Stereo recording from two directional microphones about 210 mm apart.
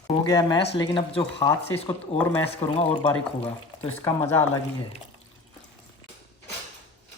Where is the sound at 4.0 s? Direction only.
10° left (ahead or behind).